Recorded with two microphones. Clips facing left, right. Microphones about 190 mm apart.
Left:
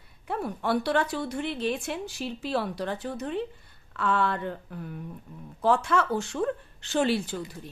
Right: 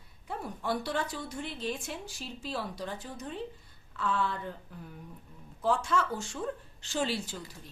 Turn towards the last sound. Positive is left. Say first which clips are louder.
# left 7 dB
turn(degrees=60)  # may be behind; listen again after turning